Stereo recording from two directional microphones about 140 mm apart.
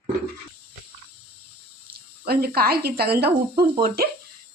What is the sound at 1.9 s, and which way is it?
Speech, 90° right.